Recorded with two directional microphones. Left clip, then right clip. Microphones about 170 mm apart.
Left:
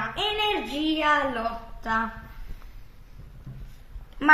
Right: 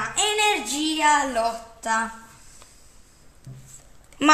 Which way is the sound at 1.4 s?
40° right (ahead or behind).